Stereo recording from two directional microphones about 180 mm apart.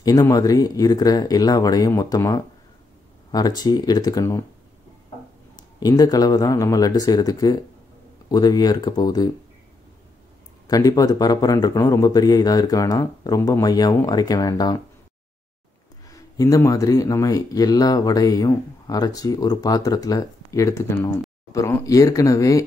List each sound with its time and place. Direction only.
0.0 s speech: 20° left (ahead or behind)
5.8 s speech: 20° left (ahead or behind)
10.7 s speech: 20° left (ahead or behind)
16.1 s speech: 20° left (ahead or behind)